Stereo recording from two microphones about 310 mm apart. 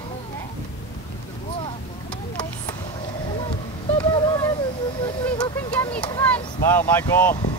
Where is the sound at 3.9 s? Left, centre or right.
Centre.